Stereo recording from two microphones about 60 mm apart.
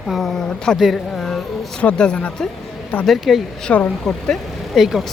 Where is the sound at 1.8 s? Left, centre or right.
Centre.